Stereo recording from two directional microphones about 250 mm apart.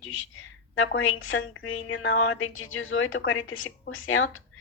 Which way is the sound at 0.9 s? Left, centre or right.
Left.